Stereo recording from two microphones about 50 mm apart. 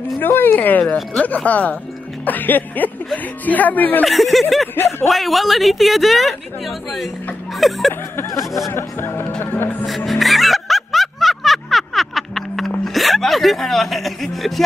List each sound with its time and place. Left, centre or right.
0.2 s speech: left
4.0 s a woman's voice: centre
8.7 s speech: left
9.8 s music: centre
12.8 s a sound: centre